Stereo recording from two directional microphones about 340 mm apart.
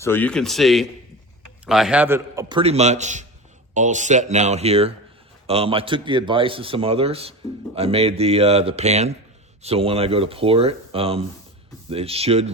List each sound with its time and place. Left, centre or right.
0.0 s speech: centre